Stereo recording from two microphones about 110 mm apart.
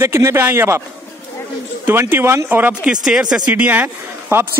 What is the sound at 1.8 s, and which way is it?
Speech, 20° right (ahead or behind).